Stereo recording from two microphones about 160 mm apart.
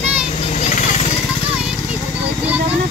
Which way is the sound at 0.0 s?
10° right (ahead or behind).